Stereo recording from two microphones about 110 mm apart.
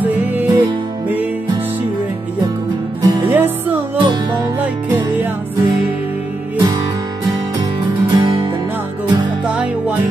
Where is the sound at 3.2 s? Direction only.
20° right (ahead or behind).